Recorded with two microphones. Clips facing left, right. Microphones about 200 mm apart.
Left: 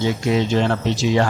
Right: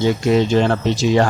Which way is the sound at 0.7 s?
45° right (ahead or behind).